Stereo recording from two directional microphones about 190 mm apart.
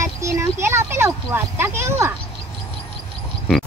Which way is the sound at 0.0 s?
15° right (ahead or behind).